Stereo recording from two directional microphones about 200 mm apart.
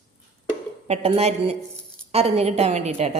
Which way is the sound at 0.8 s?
30° right (ahead or behind).